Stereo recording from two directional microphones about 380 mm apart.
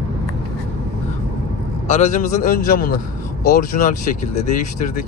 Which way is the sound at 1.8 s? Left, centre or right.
Centre.